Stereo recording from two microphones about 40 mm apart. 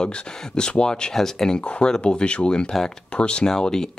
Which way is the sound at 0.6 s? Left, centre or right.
Left.